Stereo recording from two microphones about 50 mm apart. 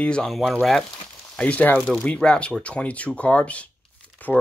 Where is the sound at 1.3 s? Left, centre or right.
Left.